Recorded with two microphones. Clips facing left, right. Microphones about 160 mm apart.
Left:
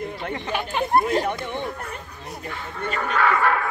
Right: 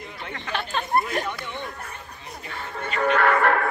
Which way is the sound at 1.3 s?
50° left (ahead or behind).